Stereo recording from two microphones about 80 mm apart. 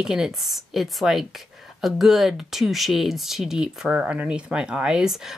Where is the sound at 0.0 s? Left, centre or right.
Centre.